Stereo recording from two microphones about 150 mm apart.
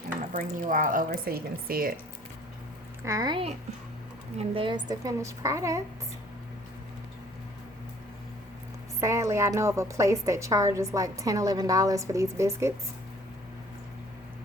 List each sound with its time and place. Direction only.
0.3 s speech: 60° right (ahead or behind)
3.0 s a woman's voice: 20° right (ahead or behind)
9.0 s a woman's voice: 20° right (ahead or behind)